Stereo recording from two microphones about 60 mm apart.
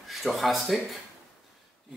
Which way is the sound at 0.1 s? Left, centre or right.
Centre.